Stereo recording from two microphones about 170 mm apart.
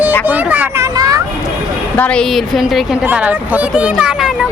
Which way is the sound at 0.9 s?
20° right (ahead or behind).